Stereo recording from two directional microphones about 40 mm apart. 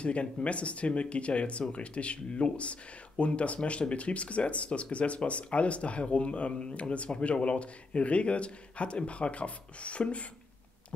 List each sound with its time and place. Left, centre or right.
0.0 s speech: left